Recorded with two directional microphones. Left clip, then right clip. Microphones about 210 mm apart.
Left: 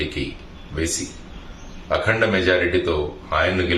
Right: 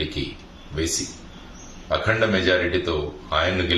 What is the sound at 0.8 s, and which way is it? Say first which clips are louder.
Speech: even; centre (ahead or behind).